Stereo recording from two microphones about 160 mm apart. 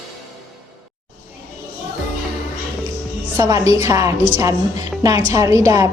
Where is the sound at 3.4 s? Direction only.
20° right (ahead or behind).